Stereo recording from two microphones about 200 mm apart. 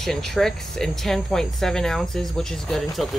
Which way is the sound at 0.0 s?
Centre (ahead or behind).